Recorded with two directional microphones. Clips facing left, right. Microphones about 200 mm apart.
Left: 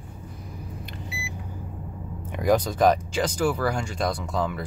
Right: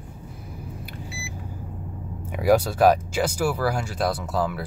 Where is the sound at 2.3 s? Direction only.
10° right (ahead or behind).